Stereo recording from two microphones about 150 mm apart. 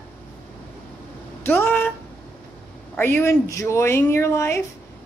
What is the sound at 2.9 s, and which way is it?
A woman's voice, 15° left (ahead or behind).